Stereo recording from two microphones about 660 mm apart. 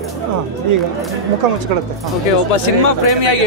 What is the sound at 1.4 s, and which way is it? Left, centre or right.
Speech, right.